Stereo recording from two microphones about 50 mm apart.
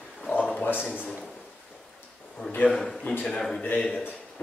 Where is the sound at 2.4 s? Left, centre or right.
Left.